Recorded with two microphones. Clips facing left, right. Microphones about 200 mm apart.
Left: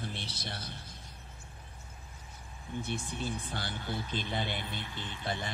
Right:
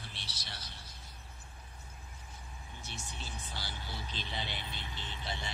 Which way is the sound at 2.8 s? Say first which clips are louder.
Left 12 dB; 55° left (ahead or behind).